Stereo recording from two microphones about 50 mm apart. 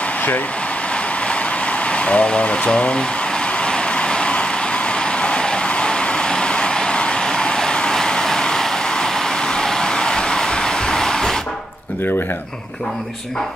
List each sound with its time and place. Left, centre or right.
1.9 s speech: left
3.6 s vehicle: left